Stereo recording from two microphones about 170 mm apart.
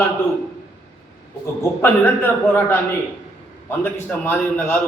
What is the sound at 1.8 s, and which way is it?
Speech, 10° left (ahead or behind).